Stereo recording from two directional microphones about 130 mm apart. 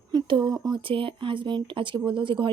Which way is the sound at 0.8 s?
40° right (ahead or behind).